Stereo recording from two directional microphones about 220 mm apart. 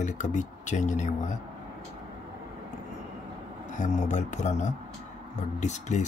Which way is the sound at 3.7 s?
35° left (ahead or behind).